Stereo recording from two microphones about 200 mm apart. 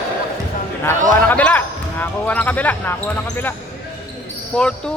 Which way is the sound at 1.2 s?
10° left (ahead or behind).